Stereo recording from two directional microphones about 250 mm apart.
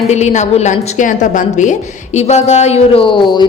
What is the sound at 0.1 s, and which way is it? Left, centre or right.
A woman's voice, left.